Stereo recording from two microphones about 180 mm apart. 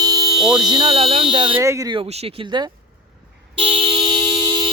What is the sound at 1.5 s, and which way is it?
Speech, 15° right (ahead or behind).